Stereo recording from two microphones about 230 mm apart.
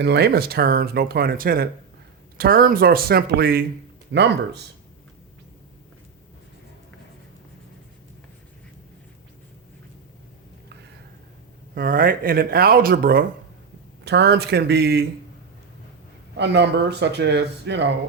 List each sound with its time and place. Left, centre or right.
0.0 s speech: right
11.7 s speech: right
16.4 s speech: right